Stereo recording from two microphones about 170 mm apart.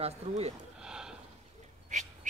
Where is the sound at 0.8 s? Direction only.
5° right (ahead or behind).